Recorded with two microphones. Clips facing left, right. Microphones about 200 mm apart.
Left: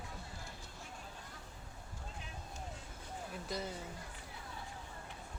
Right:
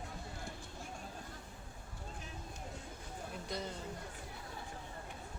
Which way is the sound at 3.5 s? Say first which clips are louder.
Left 1 dB; 5° left (ahead or behind).